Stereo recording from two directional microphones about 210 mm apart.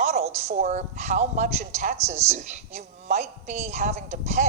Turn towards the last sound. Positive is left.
turn(degrees=-30)  # may be behind; listen again after turning